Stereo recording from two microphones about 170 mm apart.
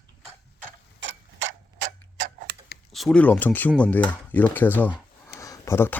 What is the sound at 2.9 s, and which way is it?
Speech, 5° left (ahead or behind).